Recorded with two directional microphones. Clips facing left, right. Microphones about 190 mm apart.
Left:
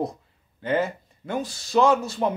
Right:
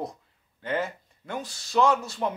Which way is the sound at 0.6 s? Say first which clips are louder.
Left 5 dB; 25° left (ahead or behind).